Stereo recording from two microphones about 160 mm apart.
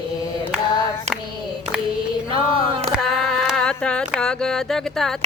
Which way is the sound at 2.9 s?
Centre (ahead or behind).